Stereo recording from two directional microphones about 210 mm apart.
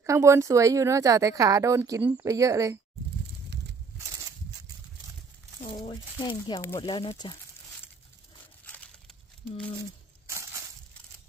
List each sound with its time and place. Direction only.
0.0 s speech: 15° right (ahead or behind)
5.9 s speech: 20° left (ahead or behind)
8.6 s crumpling: 5° left (ahead or behind)